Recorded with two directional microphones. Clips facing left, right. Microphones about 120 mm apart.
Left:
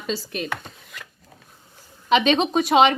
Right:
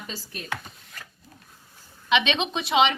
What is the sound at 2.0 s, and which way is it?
Speech, 40° left (ahead or behind).